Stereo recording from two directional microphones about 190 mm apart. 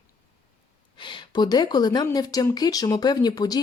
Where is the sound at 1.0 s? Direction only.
25° left (ahead or behind).